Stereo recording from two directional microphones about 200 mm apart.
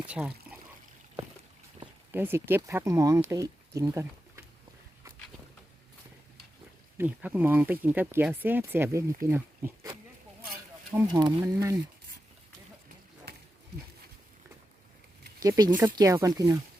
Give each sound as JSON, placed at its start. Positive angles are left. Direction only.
{"t": 0.1, "sound": "speech", "side_deg": -5}
{"t": 2.1, "sound": "speech", "side_deg": -10}
{"t": 6.9, "sound": "speech", "side_deg": -10}
{"t": 9.2, "sound": "a sound", "side_deg": -10}
{"t": 11.2, "sound": "speech", "side_deg": -20}
{"t": 15.4, "sound": "speech", "side_deg": -20}